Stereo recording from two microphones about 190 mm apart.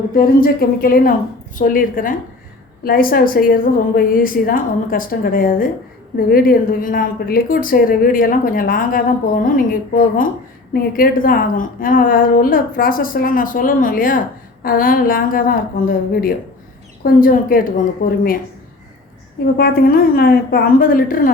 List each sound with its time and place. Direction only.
0.1 s a woman's voice: 50° left (ahead or behind)
17.0 s a woman's voice: 45° left (ahead or behind)
19.5 s a woman's voice: 55° left (ahead or behind)